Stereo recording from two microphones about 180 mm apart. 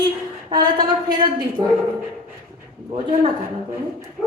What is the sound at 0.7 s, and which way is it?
Speech, 25° right (ahead or behind).